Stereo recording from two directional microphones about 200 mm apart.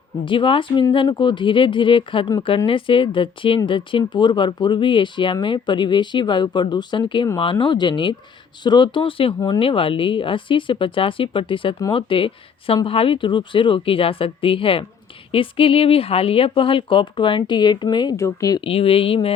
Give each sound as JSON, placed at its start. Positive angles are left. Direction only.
{"t": 0.3, "sound": "speech", "side_deg": 25}